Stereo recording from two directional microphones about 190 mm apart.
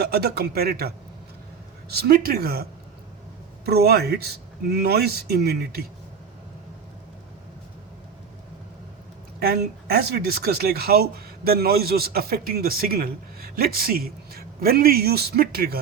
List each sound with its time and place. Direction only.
0.0 s speech: 55° right (ahead or behind)
3.7 s speech: 55° right (ahead or behind)
9.4 s speech: 55° right (ahead or behind)